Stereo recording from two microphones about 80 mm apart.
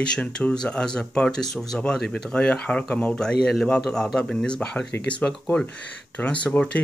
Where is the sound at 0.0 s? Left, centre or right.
Centre.